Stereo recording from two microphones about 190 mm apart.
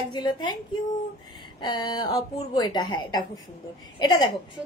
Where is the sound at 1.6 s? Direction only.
20° left (ahead or behind).